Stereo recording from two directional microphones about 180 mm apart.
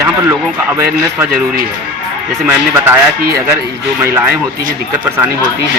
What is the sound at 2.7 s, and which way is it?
Speech, 10° right (ahead or behind).